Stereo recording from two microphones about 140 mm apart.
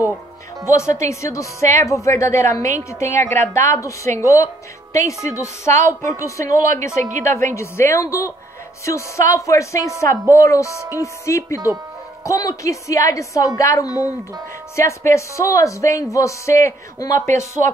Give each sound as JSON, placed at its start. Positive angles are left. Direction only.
{"t": 0.7, "sound": "a woman's voice", "side_deg": 20}
{"t": 7.0, "sound": "a woman's voice", "side_deg": -60}
{"t": 7.5, "sound": "a woman's voice", "side_deg": 20}